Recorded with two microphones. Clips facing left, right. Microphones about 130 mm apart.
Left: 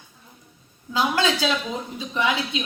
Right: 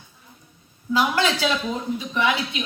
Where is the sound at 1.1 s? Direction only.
20° left (ahead or behind).